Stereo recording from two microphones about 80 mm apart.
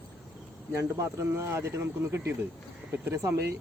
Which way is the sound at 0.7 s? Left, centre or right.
Right.